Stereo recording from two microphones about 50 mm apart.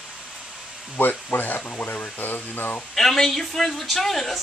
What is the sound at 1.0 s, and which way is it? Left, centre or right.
Speech, left.